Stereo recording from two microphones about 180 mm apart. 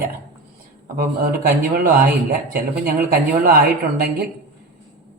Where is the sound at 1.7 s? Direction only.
55° right (ahead or behind).